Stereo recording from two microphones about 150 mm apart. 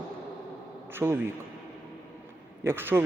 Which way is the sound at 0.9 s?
15° right (ahead or behind).